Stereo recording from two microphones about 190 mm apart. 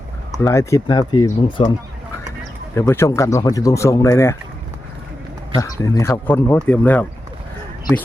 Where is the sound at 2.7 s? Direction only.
15° left (ahead or behind).